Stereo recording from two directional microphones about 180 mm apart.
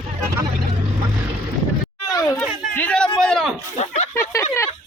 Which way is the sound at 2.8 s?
5° left (ahead or behind).